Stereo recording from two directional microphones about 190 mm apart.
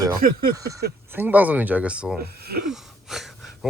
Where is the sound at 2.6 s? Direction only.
Centre (ahead or behind).